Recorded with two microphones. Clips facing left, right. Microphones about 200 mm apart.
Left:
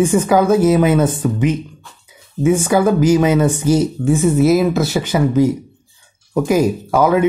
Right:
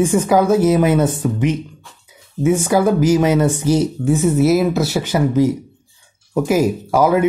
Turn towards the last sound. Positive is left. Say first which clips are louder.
# left 1 dB
turn(degrees=-5)  # may be behind; listen again after turning